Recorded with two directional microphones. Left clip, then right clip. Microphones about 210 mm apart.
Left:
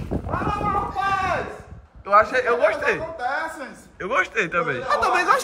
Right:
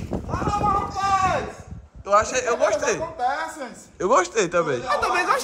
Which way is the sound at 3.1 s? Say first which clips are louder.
Right 1 dB; 50° right (ahead or behind).